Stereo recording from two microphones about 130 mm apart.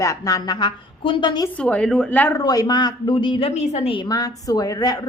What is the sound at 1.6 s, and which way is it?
Speech, 10° left (ahead or behind).